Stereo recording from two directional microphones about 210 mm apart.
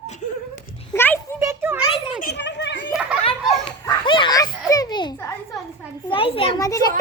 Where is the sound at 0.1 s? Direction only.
35° left (ahead or behind).